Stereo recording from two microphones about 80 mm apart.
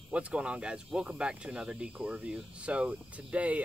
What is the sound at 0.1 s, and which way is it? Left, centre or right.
Speech, centre.